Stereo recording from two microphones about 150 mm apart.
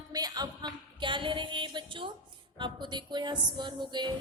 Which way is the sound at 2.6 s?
30° right (ahead or behind).